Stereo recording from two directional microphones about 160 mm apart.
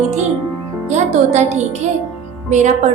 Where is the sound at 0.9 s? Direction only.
45° right (ahead or behind).